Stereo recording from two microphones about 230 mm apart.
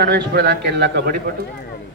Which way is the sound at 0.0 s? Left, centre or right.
Right.